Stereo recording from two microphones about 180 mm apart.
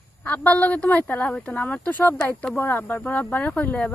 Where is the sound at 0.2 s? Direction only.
10° left (ahead or behind).